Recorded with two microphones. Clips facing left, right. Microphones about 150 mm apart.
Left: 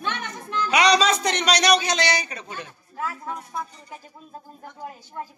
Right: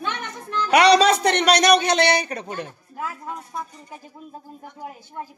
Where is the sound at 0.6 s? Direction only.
60° right (ahead or behind).